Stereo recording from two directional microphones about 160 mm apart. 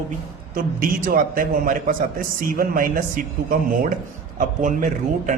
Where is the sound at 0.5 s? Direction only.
65° right (ahead or behind).